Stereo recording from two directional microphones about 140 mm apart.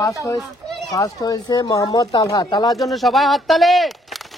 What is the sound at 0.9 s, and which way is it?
Speech, 25° left (ahead or behind).